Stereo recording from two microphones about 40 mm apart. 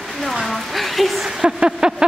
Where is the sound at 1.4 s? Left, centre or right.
Centre.